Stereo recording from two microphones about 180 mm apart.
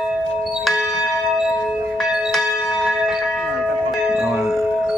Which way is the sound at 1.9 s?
Centre (ahead or behind).